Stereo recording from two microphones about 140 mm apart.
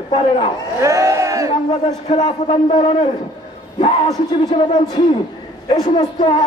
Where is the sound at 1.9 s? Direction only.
55° left (ahead or behind).